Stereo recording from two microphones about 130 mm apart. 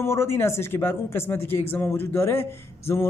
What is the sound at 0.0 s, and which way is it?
Speech, 20° left (ahead or behind).